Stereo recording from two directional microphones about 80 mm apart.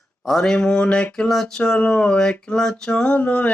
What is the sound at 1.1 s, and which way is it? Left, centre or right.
Speech, centre.